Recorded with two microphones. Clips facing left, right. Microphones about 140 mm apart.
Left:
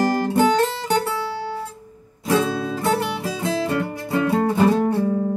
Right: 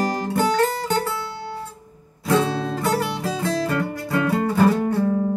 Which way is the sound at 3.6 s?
25° left (ahead or behind).